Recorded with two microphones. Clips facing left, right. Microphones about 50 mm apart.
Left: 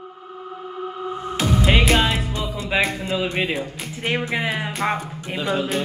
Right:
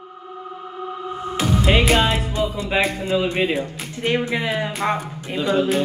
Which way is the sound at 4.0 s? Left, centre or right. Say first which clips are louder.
Right 2 dB; centre.